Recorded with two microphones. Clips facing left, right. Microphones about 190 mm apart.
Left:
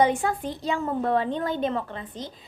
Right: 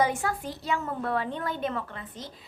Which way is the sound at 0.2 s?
25° left (ahead or behind).